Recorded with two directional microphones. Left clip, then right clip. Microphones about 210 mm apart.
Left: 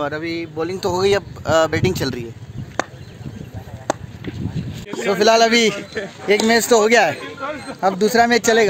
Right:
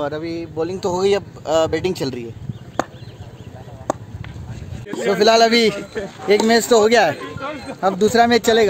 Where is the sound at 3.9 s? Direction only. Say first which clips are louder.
Left 1 dB; 40° right (ahead or behind).